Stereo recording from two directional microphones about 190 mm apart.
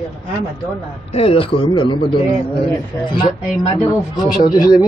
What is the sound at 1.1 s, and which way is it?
Speech, 30° left (ahead or behind).